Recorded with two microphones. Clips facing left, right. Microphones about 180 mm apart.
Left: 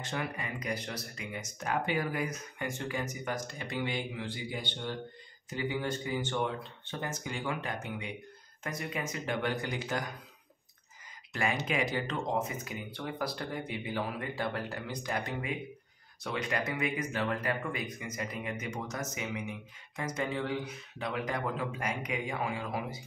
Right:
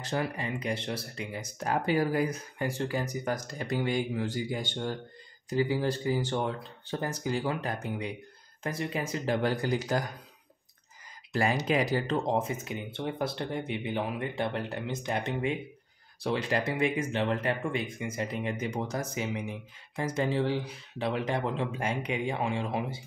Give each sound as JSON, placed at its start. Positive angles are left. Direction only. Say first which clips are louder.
{"t": 0.0, "sound": "speech", "louder": "right 5 dB", "side_deg": -35}
{"t": 5.5, "sound": "speech", "louder": "right 6 dB", "side_deg": -35}
{"t": 11.3, "sound": "speech", "louder": "right 5 dB", "side_deg": -35}